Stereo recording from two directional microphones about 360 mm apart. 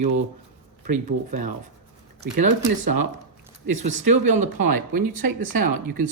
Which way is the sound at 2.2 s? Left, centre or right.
Right.